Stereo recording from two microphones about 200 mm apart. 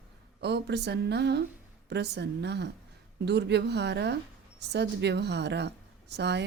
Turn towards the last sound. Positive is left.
turn(degrees=-60)  # may be behind; listen again after turning